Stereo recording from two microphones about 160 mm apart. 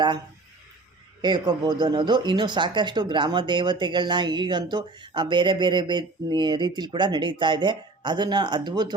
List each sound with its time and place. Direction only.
1.2 s speech: 25° right (ahead or behind)